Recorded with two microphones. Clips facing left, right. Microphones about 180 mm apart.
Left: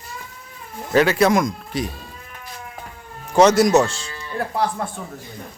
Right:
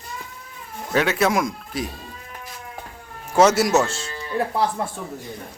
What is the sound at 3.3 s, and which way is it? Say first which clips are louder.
Speech: left 3 dB; 5° right (ahead or behind).